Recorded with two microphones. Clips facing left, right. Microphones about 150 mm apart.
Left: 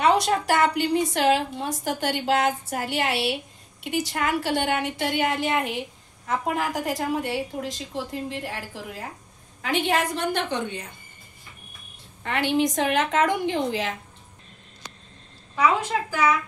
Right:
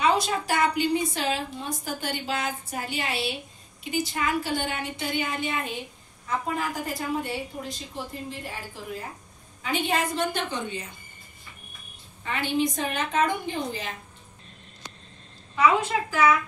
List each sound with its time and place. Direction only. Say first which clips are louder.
0.0 s a woman's voice: left 3 dB; 70° left (ahead or behind)
12.2 s a woman's voice: left 3 dB; 75° left (ahead or behind); by 13.9 s 90° left